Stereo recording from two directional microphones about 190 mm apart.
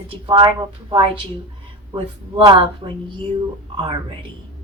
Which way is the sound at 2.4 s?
25° right (ahead or behind).